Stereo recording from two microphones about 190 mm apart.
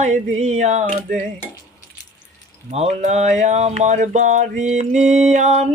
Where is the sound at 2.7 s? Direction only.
35° right (ahead or behind).